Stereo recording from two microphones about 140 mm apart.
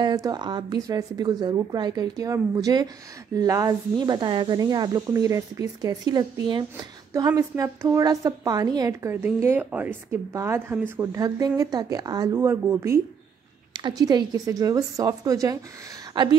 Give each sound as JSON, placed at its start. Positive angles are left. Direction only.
{"t": 0.0, "sound": "speech", "side_deg": -25}
{"t": 9.1, "sound": "a woman's voice", "side_deg": -15}
{"t": 13.7, "sound": "speech", "side_deg": -30}